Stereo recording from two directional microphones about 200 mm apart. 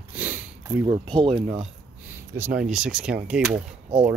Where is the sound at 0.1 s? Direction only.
10° right (ahead or behind).